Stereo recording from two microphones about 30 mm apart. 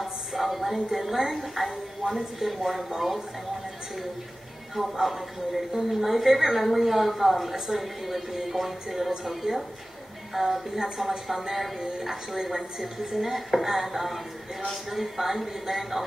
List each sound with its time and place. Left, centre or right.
0.0 s a sound: centre
0.7 s a woman's voice: centre
1.3 s a woman's voice: centre
4.7 s a woman's voice: centre